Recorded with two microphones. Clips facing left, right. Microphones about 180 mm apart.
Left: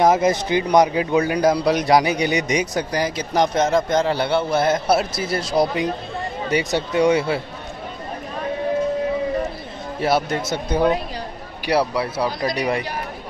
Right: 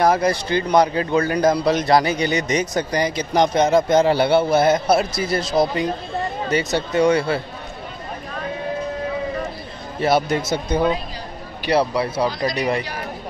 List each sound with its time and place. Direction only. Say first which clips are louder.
0.0 s a man's voice: left 1 dB; 20° left (ahead or behind); by 3.8 s centre (ahead or behind)
3.9 s a man's voice: right 4 dB; 10° right (ahead or behind); by 7.4 s 15° left (ahead or behind)
9.9 s a man's voice: right 2 dB; 5° left (ahead or behind)